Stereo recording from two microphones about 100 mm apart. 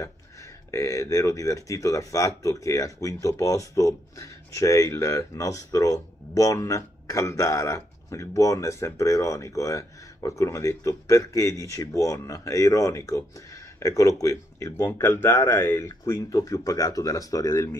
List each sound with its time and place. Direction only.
0.7 s speech: 30° left (ahead or behind)